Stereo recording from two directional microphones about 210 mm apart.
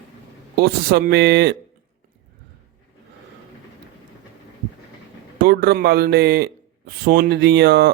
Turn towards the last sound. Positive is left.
turn(degrees=-50)  # may be behind; listen again after turning